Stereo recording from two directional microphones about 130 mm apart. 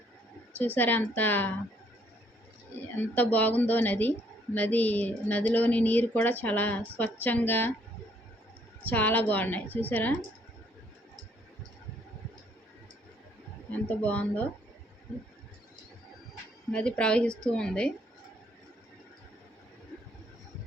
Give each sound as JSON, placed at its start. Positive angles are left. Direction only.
{"t": 0.5, "sound": "a woman's voice", "side_deg": 15}
{"t": 3.0, "sound": "a woman's voice", "side_deg": 15}
{"t": 8.8, "sound": "a woman's voice", "side_deg": 15}
{"t": 13.7, "sound": "a woman's voice", "side_deg": 10}
{"t": 16.7, "sound": "a woman's voice", "side_deg": 10}